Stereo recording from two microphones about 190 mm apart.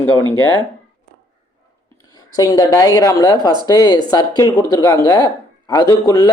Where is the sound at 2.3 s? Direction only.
20° left (ahead or behind).